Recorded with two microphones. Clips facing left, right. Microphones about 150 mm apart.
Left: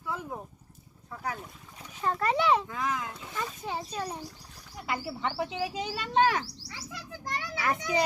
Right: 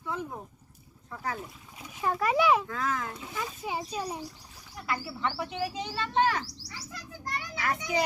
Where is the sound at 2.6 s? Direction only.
15° left (ahead or behind).